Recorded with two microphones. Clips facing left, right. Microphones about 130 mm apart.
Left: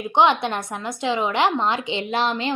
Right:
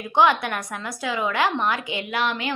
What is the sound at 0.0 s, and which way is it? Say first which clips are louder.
A woman's voice: left 1 dB; 20° left (ahead or behind).